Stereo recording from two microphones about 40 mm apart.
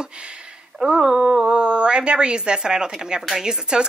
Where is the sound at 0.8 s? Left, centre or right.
Centre.